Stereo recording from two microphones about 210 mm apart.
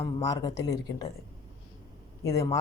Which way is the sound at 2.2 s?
15° left (ahead or behind).